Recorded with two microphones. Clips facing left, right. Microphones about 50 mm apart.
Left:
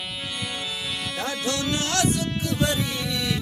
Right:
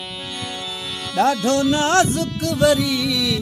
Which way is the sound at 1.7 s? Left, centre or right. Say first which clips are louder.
Right 9 dB; right.